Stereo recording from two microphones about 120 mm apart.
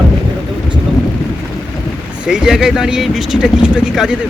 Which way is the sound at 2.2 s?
5° right (ahead or behind).